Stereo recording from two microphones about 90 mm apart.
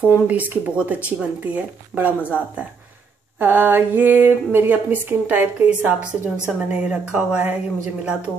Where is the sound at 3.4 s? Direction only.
20° right (ahead or behind).